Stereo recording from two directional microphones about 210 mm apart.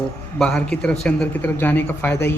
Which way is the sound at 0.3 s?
5° left (ahead or behind).